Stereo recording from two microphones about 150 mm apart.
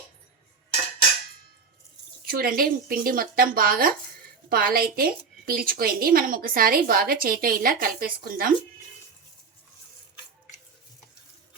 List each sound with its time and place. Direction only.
2.2 s a woman's voice: 75° right (ahead or behind)